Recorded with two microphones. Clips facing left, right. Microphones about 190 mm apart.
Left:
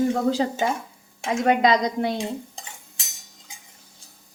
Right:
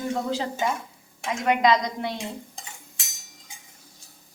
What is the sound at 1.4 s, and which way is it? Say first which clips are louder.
Speech: left 2 dB; 35° left (ahead or behind).